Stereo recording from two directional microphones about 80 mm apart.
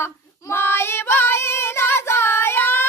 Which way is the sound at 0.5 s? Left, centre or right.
Left.